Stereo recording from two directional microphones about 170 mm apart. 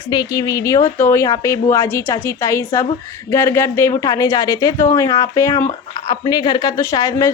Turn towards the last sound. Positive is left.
turn(degrees=20)  # may be behind; listen again after turning